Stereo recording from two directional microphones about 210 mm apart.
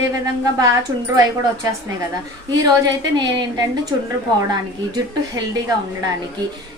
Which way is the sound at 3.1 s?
20° right (ahead or behind).